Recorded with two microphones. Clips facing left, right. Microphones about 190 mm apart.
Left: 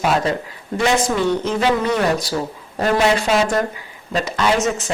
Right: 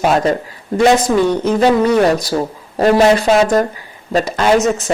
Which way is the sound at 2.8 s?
40° right (ahead or behind).